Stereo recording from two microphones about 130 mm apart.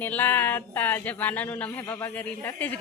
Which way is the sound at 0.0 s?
15° left (ahead or behind).